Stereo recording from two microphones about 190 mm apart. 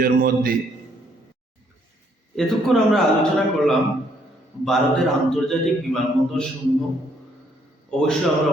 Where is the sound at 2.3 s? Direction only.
Centre (ahead or behind).